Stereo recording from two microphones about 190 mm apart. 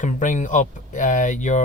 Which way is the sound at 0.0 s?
40° left (ahead or behind).